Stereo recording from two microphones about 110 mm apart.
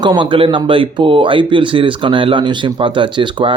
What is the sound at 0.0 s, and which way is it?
Speech, 45° right (ahead or behind).